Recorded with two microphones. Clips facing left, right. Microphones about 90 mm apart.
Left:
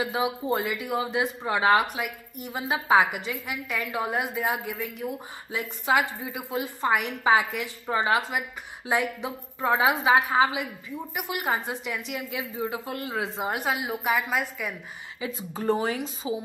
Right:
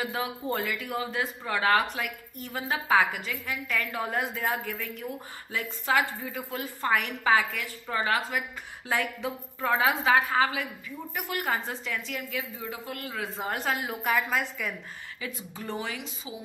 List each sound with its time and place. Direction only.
0.0 s speech: 15° left (ahead or behind)
15.1 s speech: 25° left (ahead or behind)
15.5 s speech: 40° left (ahead or behind)